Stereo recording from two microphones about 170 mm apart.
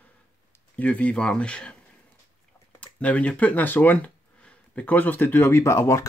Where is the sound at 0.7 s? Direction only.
10° left (ahead or behind).